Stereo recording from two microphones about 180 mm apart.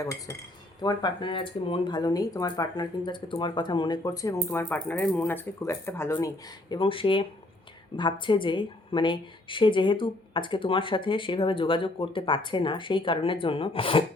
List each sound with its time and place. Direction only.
0.0 s cutlery: 20° left (ahead or behind)
0.8 s speech: 25° left (ahead or behind)